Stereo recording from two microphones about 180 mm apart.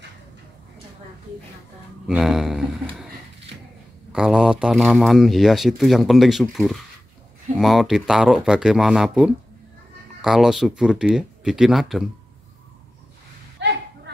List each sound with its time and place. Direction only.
2.0 s speech: centre (ahead or behind)
4.1 s speech: 5° right (ahead or behind)
13.6 s a sound: 70° right (ahead or behind)